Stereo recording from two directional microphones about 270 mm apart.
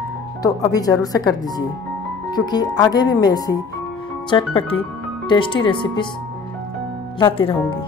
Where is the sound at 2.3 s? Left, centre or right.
Centre.